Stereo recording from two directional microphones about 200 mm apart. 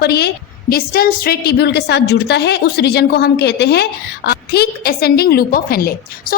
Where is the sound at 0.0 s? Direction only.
55° left (ahead or behind).